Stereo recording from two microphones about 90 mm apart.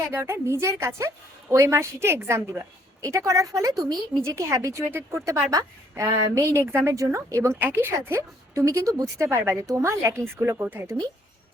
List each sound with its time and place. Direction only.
0.1 s a woman's voice: 30° right (ahead or behind); by 4.2 s 45° right (ahead or behind)
4.2 s a woman's voice: 30° right (ahead or behind)
7.6 s a woman's voice: 25° right (ahead or behind)